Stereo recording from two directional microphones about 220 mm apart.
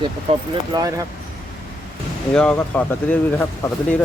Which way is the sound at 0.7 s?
15° right (ahead or behind).